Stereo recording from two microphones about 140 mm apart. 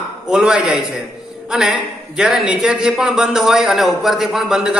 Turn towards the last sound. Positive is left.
turn(degrees=-5)  # may be behind; listen again after turning